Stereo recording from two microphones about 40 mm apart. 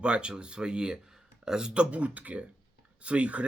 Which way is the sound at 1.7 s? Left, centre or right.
Right.